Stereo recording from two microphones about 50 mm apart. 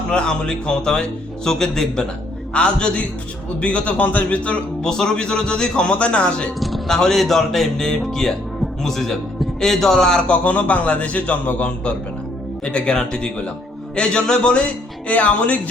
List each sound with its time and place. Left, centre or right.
0.1 s a man's voice: centre
4.8 s a man's voice: centre
6.6 s speech: centre
6.8 s a man's voice: centre
10.4 s a man's voice: left